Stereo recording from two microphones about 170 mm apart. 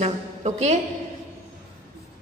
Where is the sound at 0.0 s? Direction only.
40° right (ahead or behind).